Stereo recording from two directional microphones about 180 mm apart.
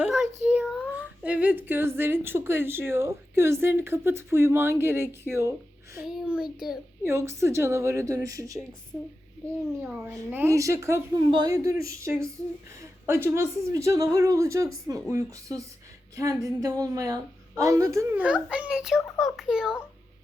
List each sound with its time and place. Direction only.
0.0 s whimper: centre (ahead or behind)
0.4 s speech: 5° right (ahead or behind)
6.0 s a child's voice: 5° right (ahead or behind)
7.0 s a woman's voice: 15° right (ahead or behind)
10.1 s a woman's voice: 10° right (ahead or behind)